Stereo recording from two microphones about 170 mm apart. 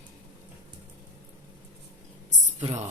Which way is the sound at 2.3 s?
45° right (ahead or behind).